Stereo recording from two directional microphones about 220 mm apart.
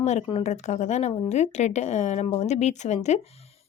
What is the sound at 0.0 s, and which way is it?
A woman's voice, 30° left (ahead or behind).